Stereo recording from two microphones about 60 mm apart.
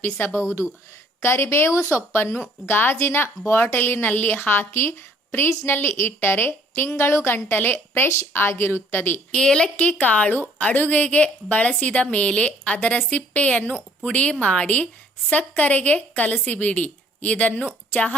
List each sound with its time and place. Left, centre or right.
0.2 s a woman's voice: left
0.6 s speech: centre
1.2 s speech: left
2.1 s a woman's voice: left
9.3 s a woman's voice: centre
9.7 s a woman's voice: left